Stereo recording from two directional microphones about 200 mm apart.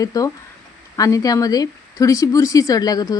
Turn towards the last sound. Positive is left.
turn(degrees=20)  # may be behind; listen again after turning